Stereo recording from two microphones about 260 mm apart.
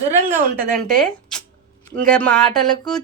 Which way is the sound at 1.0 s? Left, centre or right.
Centre.